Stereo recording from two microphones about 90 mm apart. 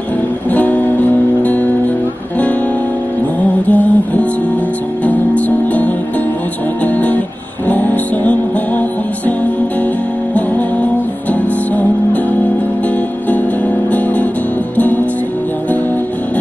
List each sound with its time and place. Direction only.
0.5 s music: 15° left (ahead or behind)
3.6 s music: 15° left (ahead or behind)
7.6 s music: 20° left (ahead or behind)
11.7 s music: 15° left (ahead or behind)